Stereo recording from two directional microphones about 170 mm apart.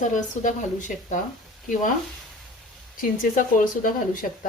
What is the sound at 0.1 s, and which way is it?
Speech, 50° left (ahead or behind).